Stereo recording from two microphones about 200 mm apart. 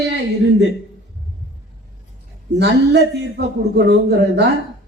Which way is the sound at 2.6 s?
55° right (ahead or behind).